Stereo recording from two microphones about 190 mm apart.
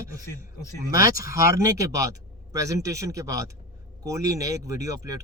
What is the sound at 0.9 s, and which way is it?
Speech, 15° right (ahead or behind).